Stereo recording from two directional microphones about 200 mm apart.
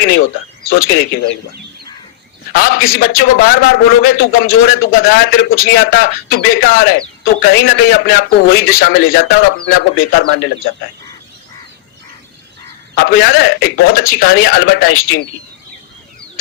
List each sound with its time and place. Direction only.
0.0 s a man's voice: 55° left (ahead or behind)
2.5 s a man's voice: 50° left (ahead or behind)
13.0 s a man's voice: 50° left (ahead or behind)